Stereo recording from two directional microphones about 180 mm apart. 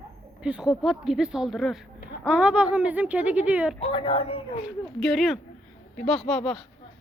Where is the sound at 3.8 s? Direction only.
30° left (ahead or behind).